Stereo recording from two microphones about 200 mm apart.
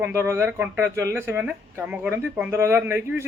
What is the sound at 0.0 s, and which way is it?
Speech, 15° right (ahead or behind).